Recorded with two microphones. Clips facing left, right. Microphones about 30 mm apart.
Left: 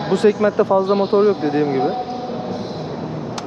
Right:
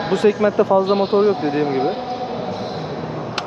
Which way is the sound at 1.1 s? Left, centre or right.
Right.